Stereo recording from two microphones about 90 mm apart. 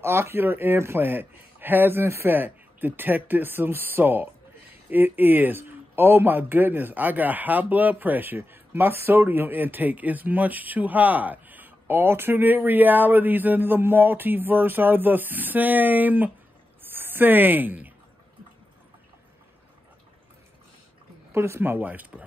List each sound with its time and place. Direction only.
0.0 s a man's voice: 25° right (ahead or behind)
21.3 s a man's voice: 30° right (ahead or behind)